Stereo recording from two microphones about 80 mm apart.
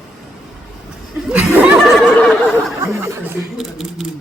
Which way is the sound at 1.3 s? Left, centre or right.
Centre.